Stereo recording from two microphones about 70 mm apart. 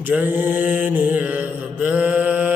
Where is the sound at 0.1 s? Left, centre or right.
Right.